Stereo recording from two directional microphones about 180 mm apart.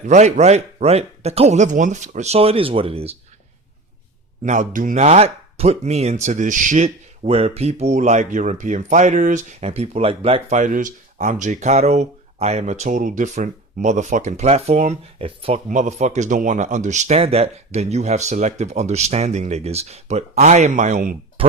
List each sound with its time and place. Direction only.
0.0 s speech: 40° right (ahead or behind)
4.4 s speech: 45° right (ahead or behind)
15.7 s speech: 40° right (ahead or behind)